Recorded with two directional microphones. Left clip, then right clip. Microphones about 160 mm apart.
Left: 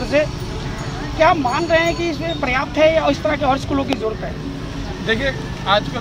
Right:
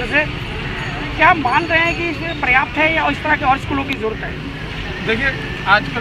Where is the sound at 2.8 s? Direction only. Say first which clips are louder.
Left 1 dB; 80° left.